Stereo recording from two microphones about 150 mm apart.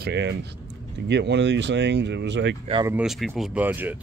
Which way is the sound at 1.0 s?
90° right.